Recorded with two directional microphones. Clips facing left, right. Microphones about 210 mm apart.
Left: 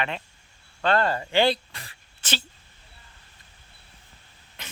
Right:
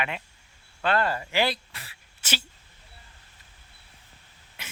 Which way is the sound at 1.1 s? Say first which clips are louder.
Left 5 dB; 30° left (ahead or behind).